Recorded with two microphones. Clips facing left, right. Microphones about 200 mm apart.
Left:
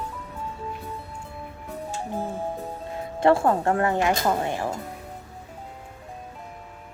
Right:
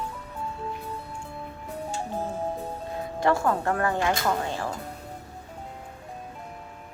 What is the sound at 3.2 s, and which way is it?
Speech, 30° left (ahead or behind).